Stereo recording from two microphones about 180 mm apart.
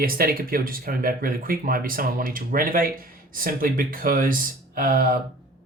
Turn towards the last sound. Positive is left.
turn(degrees=-50)  # may be behind; listen again after turning